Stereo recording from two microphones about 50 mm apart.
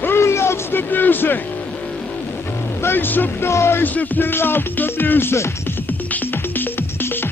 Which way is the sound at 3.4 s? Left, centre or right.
Left.